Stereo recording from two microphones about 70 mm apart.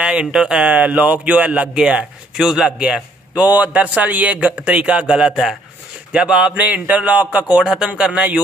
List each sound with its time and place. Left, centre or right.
0.0 s speech: centre
7.6 s speech: centre